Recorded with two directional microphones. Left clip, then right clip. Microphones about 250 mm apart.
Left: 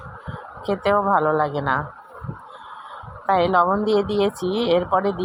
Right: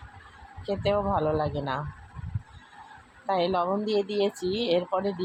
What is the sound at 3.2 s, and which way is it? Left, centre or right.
Speech, centre.